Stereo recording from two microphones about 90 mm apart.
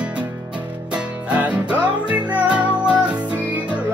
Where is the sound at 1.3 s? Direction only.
15° right (ahead or behind).